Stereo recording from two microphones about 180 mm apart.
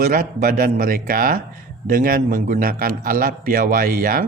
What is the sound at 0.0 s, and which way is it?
Speech, 55° right (ahead or behind).